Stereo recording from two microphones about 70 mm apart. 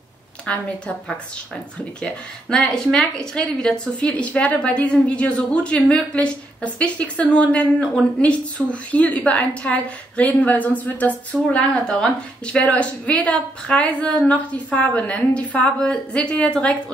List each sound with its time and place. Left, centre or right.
0.5 s a woman's voice: centre
2.5 s a woman's voice: centre